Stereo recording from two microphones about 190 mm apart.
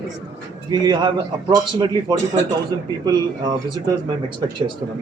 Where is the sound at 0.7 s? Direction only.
25° right (ahead or behind).